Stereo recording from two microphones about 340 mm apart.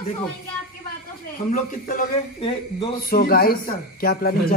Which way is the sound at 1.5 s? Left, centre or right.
Left.